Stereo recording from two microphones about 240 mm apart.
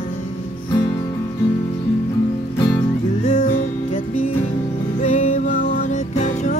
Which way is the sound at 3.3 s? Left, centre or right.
Left.